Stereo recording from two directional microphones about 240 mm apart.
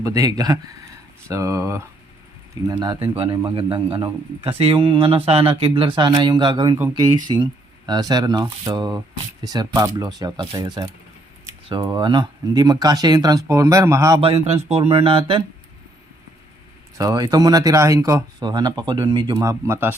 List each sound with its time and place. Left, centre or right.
0.0 s a man's voice: centre
14.2 s a man's voice: right
17.0 s speech: centre